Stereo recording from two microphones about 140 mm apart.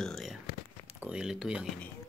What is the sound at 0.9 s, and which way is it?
Speech, 10° right (ahead or behind).